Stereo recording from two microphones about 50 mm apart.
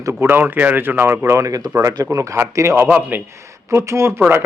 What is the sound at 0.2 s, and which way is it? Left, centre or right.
Speech, right.